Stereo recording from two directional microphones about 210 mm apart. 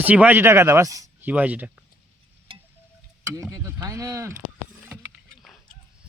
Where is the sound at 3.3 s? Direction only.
15° right (ahead or behind).